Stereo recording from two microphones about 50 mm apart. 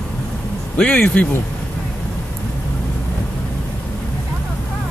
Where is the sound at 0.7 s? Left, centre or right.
Left.